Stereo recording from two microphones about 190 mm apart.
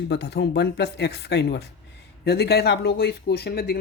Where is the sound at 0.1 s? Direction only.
65° left (ahead or behind).